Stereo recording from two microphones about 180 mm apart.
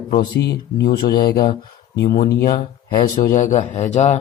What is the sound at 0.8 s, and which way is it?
Speech, 55° left (ahead or behind).